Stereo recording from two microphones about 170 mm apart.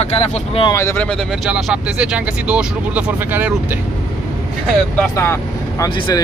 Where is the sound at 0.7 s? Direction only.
15° left (ahead or behind).